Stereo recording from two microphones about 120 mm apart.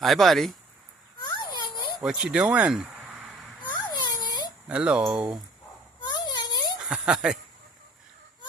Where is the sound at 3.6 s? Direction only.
35° left (ahead or behind).